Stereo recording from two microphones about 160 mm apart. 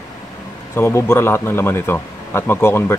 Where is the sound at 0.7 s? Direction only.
15° left (ahead or behind).